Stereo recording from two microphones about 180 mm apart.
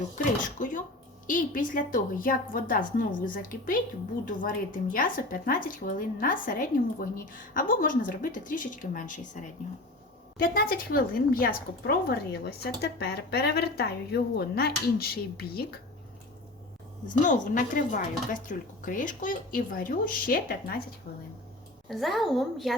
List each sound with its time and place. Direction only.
0.6 s a woman's voice: 45° left (ahead or behind)
10.3 s a woman's voice: 55° left (ahead or behind)
17.2 s a woman's voice: 45° left (ahead or behind)
21.8 s a woman's voice: centre (ahead or behind)